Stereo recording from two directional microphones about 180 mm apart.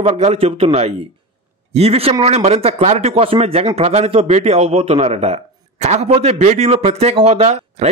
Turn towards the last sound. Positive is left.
turn(degrees=-35)  # may be behind; listen again after turning